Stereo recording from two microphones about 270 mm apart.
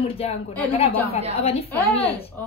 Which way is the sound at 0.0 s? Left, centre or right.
Left.